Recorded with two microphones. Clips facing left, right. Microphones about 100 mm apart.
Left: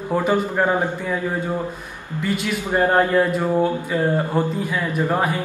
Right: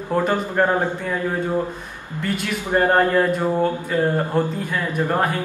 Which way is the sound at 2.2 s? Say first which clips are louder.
Left 1 dB; 5° left (ahead or behind).